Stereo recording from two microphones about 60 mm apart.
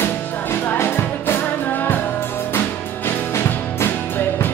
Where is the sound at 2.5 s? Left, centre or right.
Left.